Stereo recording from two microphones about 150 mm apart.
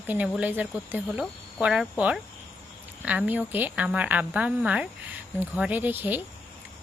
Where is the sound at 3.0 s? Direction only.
10° right (ahead or behind).